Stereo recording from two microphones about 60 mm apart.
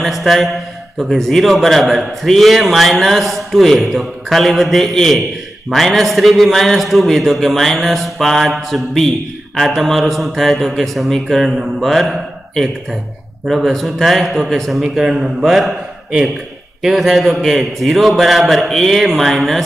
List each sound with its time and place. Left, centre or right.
0.0 s a man's voice: centre